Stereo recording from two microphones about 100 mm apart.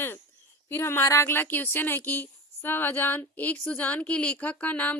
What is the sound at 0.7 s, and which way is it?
A woman's voice, 25° left (ahead or behind).